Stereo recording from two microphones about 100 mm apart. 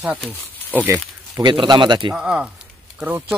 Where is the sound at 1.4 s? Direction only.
50° right (ahead or behind).